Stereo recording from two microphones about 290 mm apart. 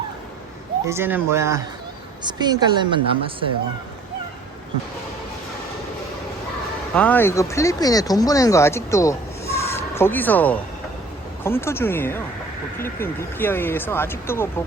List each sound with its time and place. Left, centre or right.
0.9 s a woman's voice: centre
6.9 s speech: centre